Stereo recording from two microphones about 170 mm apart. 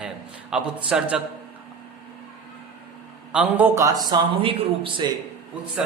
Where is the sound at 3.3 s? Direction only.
10° right (ahead or behind).